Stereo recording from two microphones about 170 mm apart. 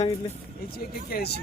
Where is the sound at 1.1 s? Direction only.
70° left (ahead or behind).